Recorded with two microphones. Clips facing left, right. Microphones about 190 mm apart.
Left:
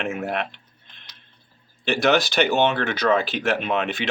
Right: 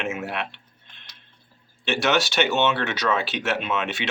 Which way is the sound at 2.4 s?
45° left (ahead or behind).